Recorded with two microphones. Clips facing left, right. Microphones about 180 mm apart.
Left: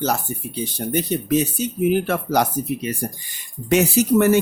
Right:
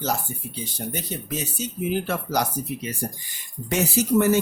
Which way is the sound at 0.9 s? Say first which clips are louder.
Left 13 dB; 65° left (ahead or behind).